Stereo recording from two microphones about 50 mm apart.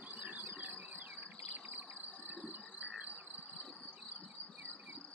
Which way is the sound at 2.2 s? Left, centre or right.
Right.